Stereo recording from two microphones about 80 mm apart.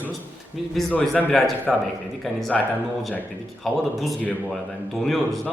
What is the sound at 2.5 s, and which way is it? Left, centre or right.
Speech, centre.